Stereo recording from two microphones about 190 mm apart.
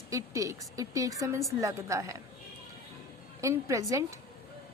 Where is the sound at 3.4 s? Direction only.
15° right (ahead or behind).